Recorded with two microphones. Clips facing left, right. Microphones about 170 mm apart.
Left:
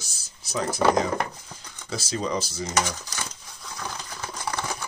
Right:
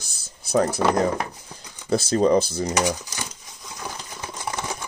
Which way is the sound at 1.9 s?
55° right (ahead or behind).